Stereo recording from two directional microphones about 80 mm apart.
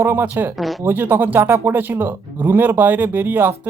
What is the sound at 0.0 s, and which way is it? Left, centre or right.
Speech, right.